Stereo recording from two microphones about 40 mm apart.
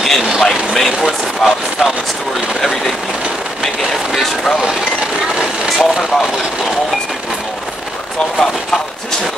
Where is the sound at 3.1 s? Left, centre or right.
Right.